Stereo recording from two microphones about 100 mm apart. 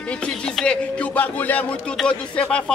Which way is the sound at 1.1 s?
15° left (ahead or behind).